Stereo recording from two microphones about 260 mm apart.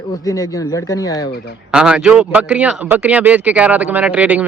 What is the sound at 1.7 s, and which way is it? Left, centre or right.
Speech, centre.